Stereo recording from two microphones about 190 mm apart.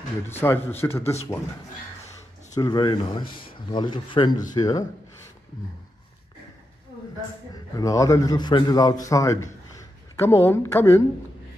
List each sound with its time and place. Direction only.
0.3 s a woman's voice: 10° left (ahead or behind)
2.5 s speech: 20° left (ahead or behind)
7.7 s a woman's voice: 15° left (ahead or behind)